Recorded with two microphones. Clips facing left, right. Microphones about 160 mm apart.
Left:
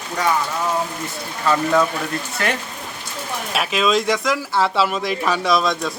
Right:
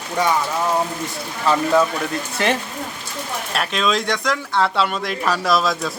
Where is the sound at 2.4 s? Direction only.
20° right (ahead or behind).